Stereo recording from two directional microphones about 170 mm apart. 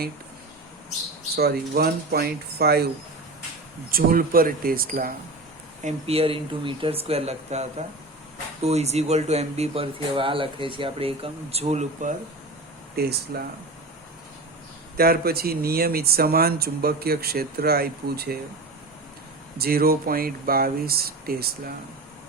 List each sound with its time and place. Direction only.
1.4 s speech: 65° right (ahead or behind)
3.9 s speech: 55° right (ahead or behind)
5.8 s speech: 35° right (ahead or behind)
13.0 s speech: 70° right (ahead or behind)
14.9 s speech: 65° right (ahead or behind)
19.5 s speech: 60° right (ahead or behind)